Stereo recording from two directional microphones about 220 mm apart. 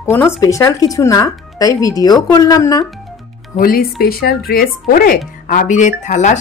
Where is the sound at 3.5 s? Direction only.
40° left (ahead or behind).